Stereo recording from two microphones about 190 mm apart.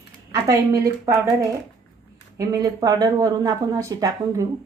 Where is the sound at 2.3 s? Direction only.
20° right (ahead or behind).